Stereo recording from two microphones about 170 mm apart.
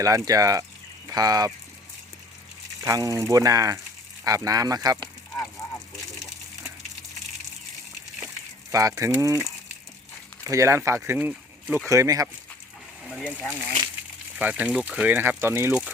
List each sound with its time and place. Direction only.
0.0 s speech: 20° right (ahead or behind)
2.8 s speech: 20° right (ahead or behind)
5.3 s a sound: 15° left (ahead or behind)
8.7 s speech: 20° right (ahead or behind)
10.4 s speech: 20° right (ahead or behind)
14.3 s speech: 5° right (ahead or behind)